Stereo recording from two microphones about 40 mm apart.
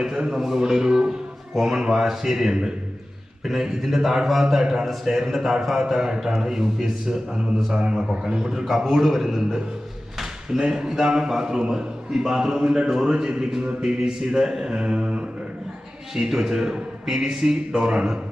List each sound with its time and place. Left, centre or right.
0.0 s a man's voice: centre
8.6 s a man's voice: centre
10.6 s a man's voice: centre
16.3 s a man's voice: centre